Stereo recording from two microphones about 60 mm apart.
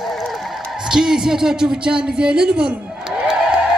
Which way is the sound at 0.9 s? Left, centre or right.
Centre.